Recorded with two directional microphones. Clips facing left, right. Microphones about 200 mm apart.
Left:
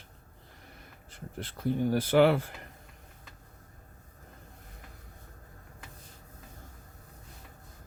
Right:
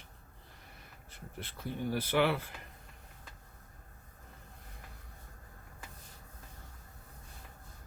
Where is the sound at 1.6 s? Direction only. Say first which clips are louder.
Left 8 dB; 50° left (ahead or behind).